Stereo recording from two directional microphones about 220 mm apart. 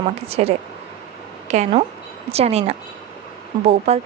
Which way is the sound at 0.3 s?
25° right (ahead or behind).